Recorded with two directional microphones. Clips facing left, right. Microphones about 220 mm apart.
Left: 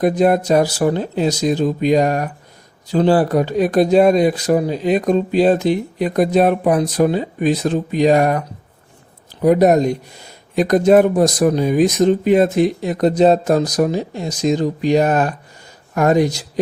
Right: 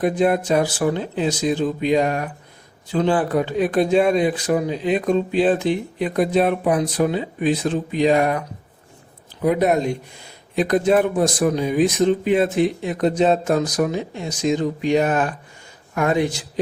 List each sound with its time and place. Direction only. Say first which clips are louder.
0.0 s speech: left 4 dB; 40° left (ahead or behind)
9.4 s speech: left 6 dB; 40° left (ahead or behind)